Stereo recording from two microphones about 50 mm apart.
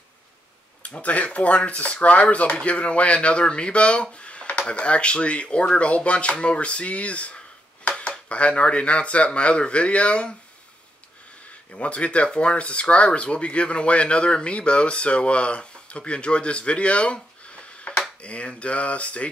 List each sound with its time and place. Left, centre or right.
0.8 s speech: left
11.7 s speech: left